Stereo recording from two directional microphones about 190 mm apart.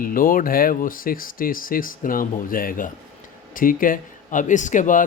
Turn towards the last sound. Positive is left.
turn(degrees=45)  # may be behind; listen again after turning